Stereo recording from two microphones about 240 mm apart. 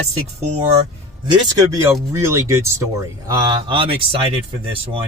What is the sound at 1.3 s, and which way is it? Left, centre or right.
Speech, centre.